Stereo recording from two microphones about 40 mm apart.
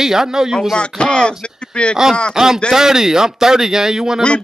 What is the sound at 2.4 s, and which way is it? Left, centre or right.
A man's voice, centre.